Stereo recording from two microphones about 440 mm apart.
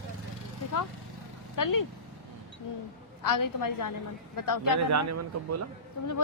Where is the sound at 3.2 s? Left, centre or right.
Left.